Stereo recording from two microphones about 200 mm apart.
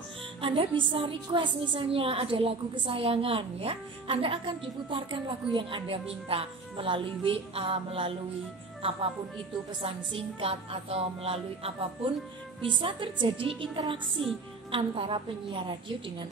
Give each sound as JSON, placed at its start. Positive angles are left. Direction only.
{"t": 0.4, "sound": "a woman's voice", "side_deg": -25}
{"t": 9.8, "sound": "a woman's voice", "side_deg": -30}